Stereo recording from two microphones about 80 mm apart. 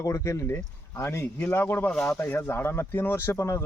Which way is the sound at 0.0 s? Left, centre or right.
Left.